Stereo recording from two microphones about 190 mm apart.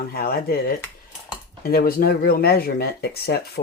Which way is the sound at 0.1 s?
55° left (ahead or behind).